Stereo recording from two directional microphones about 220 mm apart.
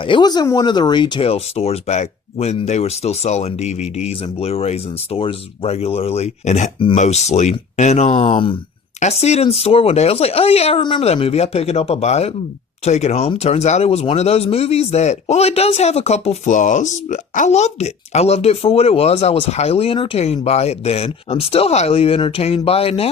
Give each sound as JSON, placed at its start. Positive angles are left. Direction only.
{"t": 0.0, "sound": "speech", "side_deg": 20}